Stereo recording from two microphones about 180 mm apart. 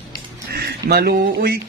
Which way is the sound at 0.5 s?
60° right (ahead or behind).